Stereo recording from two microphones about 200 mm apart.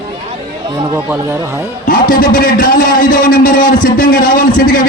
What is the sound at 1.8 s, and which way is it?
A man's voice, 45° left (ahead or behind).